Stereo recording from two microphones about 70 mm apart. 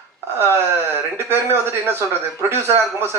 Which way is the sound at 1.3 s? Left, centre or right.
Right.